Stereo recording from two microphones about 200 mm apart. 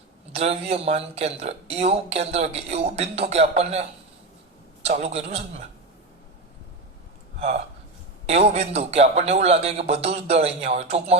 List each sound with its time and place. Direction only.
0.3 s speech: 30° right (ahead or behind)
4.9 s speech: 30° right (ahead or behind)
7.3 s speech: 30° right (ahead or behind)